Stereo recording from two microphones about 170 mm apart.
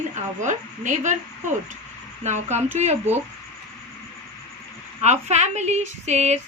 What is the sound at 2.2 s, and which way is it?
Speech, 45° right (ahead or behind).